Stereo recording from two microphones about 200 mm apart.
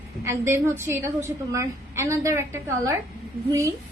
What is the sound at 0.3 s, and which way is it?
A man's voice, 15° right (ahead or behind).